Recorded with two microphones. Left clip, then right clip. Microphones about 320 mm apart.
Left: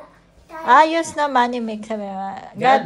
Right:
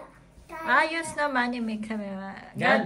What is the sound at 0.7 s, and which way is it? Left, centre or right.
Speech, centre.